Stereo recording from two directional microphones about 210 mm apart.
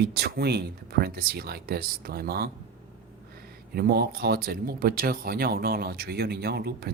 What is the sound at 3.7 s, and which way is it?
Speech, 45° right (ahead or behind).